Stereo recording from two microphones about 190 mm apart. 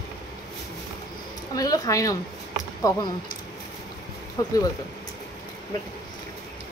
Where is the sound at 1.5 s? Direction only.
20° left (ahead or behind).